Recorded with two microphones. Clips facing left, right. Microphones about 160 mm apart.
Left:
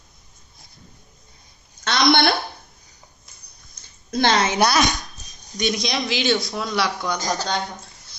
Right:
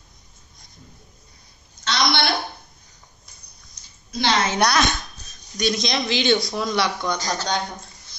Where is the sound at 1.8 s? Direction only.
50° left (ahead or behind).